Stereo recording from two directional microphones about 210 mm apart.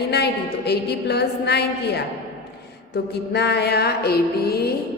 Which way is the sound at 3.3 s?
50° left (ahead or behind).